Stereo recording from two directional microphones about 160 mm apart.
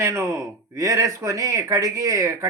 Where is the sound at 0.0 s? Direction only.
20° right (ahead or behind).